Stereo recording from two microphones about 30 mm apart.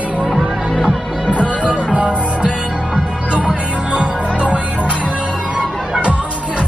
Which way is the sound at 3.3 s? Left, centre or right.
Right.